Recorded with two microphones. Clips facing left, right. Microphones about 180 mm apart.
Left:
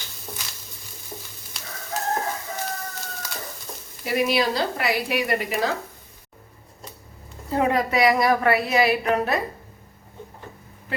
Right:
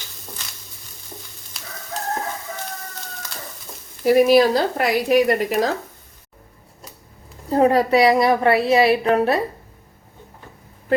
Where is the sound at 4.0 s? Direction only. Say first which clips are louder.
Right 9 dB; 45° right (ahead or behind).